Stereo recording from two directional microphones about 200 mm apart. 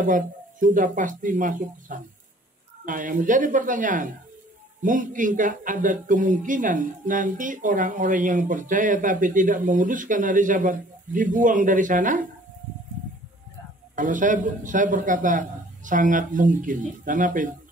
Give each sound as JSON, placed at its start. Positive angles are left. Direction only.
{"t": 0.0, "sound": "speech", "side_deg": -40}
{"t": 13.9, "sound": "speech", "side_deg": -40}